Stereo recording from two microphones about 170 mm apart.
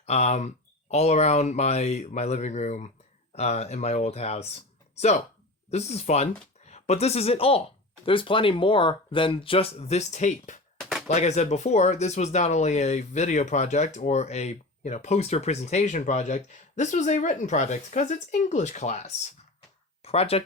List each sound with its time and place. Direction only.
0.0 s a woman's voice: 40° left (ahead or behind)
10.8 s a sound: centre (ahead or behind)
11.1 s speech: 40° left (ahead or behind)